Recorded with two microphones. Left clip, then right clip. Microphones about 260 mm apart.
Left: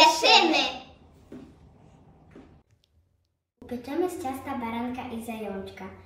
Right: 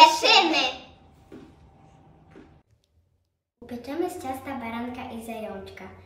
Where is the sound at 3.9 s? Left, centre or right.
Centre.